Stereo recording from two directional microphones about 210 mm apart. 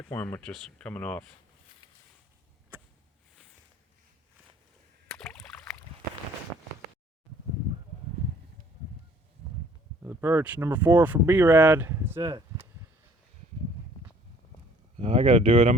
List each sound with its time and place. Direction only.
0.1 s speech: 10° left (ahead or behind)
5.0 s rowboat: 5° left (ahead or behind)
10.0 s speech: 10° right (ahead or behind)
14.9 s speech: 25° right (ahead or behind)